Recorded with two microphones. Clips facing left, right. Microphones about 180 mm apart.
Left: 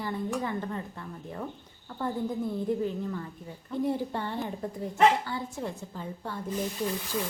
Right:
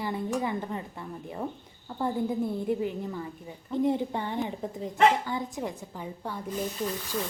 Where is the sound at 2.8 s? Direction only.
10° right (ahead or behind).